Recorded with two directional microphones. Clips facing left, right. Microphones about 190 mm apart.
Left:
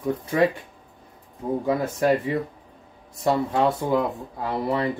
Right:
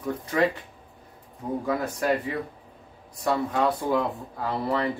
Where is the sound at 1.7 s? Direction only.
25° left (ahead or behind).